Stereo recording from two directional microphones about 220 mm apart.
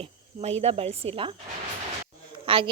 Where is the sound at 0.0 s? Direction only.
30° right (ahead or behind).